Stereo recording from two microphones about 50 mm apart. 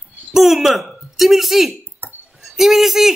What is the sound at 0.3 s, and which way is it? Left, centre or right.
Speech, centre.